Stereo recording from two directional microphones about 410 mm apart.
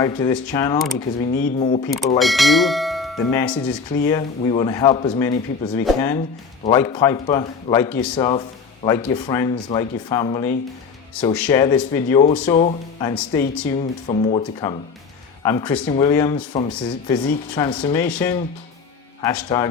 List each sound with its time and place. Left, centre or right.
0.0 s a man's voice: centre
2.1 s a man's voice: centre
13.7 s a man's voice: centre